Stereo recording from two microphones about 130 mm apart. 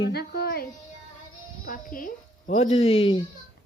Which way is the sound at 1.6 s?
90° left.